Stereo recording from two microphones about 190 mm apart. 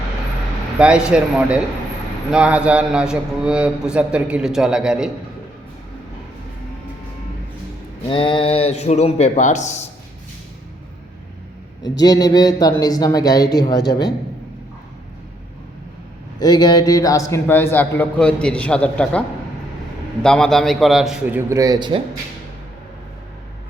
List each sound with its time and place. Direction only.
0.8 s a man's voice: 5° right (ahead or behind)
8.1 s speech: 25° left (ahead or behind)
11.8 s a woman's voice: 20° left (ahead or behind)
16.4 s a man's voice: 20° left (ahead or behind); by 19.2 s 5° left (ahead or behind)
20.2 s a man's voice: 5° left (ahead or behind); by 22.0 s 25° right (ahead or behind)